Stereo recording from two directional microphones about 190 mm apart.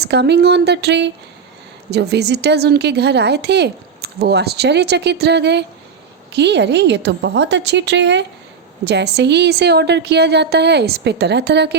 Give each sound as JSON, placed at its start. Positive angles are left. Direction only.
{"t": 0.0, "sound": "a woman's voice", "side_deg": -60}